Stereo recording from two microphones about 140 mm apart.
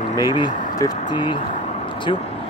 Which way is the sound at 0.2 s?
30° left (ahead or behind).